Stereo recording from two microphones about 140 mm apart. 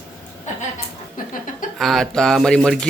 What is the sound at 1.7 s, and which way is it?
Speech, centre (ahead or behind).